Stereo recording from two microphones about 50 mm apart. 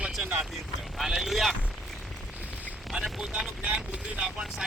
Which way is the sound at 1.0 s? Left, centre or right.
Centre.